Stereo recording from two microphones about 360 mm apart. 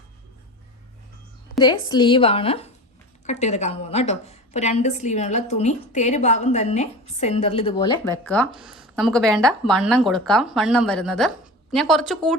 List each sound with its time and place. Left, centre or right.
1.5 s a woman's voice: centre